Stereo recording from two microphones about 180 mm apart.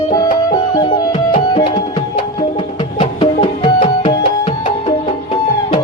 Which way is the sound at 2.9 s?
30° left (ahead or behind).